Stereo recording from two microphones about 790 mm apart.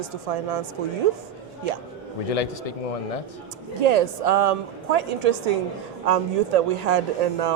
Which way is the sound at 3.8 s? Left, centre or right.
Right.